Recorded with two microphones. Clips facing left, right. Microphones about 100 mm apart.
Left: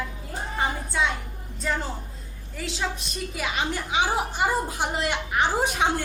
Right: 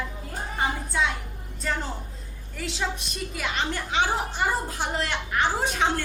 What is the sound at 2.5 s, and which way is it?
A woman's voice, centre (ahead or behind).